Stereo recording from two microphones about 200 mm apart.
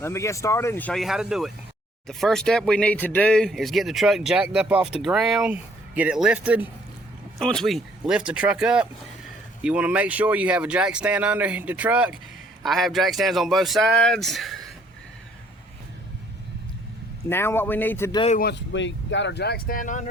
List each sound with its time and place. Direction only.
0.0 s speech: 15° left (ahead or behind)
17.2 s speech: 10° left (ahead or behind)
18.3 s speech: 60° left (ahead or behind); by 20.1 s 40° left (ahead or behind)